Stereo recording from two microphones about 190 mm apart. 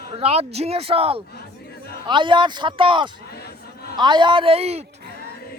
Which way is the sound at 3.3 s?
55° left (ahead or behind).